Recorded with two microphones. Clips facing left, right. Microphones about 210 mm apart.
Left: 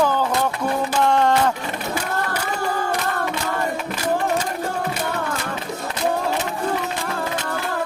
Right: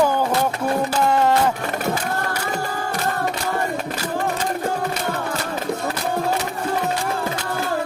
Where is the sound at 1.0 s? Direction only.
5° right (ahead or behind).